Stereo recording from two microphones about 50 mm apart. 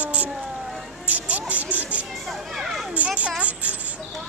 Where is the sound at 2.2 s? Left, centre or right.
Centre.